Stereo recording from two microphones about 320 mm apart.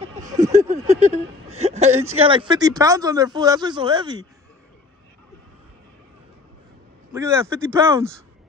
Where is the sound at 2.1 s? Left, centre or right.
Centre.